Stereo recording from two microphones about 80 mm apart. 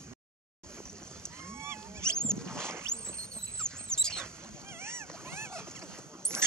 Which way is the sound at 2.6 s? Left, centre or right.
Right.